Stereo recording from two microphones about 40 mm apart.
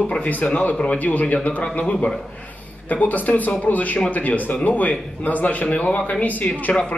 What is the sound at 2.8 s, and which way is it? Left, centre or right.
Speech, left.